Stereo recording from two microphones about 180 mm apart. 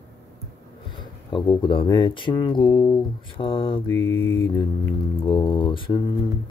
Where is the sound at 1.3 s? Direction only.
25° left (ahead or behind).